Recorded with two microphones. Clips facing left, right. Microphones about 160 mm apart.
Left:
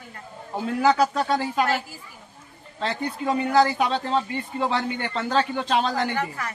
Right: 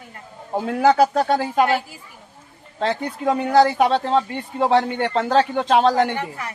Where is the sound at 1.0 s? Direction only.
45° right (ahead or behind).